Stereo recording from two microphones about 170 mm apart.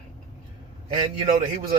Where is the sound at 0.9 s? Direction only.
35° right (ahead or behind).